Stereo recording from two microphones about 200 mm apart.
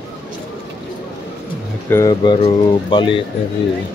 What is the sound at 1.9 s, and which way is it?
Speech, 15° left (ahead or behind).